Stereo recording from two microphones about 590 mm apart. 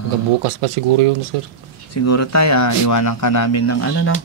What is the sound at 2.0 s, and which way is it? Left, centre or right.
A man's voice, left.